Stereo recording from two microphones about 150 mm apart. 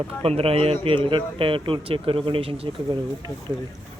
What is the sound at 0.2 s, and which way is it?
Speech, 40° right (ahead or behind).